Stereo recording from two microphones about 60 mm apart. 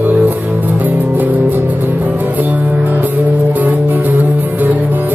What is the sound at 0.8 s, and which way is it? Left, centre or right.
Music, right.